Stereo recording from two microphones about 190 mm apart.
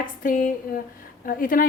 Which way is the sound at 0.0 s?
45° left (ahead or behind).